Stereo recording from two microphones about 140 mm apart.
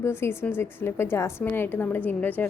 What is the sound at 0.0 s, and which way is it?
A woman's voice, 15° left (ahead or behind).